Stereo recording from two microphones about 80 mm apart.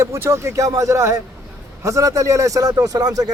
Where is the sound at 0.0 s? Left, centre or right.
Right.